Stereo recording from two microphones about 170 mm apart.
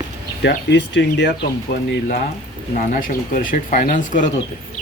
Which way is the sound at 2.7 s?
55° left (ahead or behind).